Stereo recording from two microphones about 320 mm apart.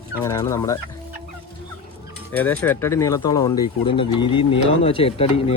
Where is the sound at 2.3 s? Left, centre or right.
Centre.